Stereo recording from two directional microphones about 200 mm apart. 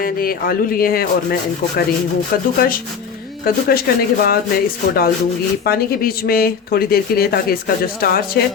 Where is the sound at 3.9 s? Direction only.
50° left (ahead or behind).